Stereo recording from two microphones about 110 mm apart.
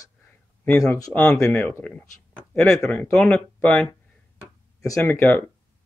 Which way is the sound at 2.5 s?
5° left (ahead or behind).